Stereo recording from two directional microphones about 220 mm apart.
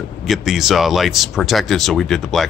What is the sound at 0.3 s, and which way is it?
Speech, centre (ahead or behind).